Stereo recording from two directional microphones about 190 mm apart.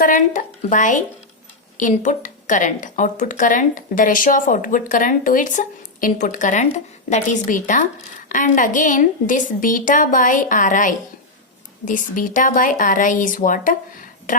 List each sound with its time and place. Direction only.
0.0 s speech: 45° left (ahead or behind)